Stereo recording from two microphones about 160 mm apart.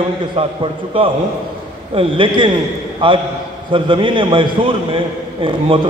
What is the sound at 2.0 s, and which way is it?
A man's voice, 30° right (ahead or behind).